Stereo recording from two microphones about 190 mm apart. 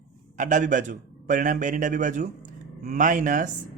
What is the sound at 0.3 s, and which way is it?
A man's voice, 40° right (ahead or behind).